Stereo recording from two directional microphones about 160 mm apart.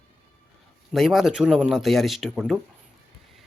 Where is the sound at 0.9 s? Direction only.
Centre (ahead or behind).